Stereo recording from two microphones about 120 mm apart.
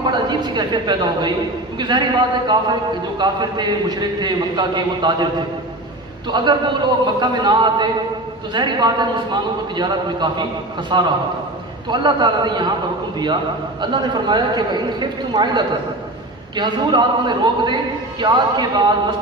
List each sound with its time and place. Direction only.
0.0 s a woman's voice: 40° right (ahead or behind)
6.3 s a man's voice: 40° right (ahead or behind)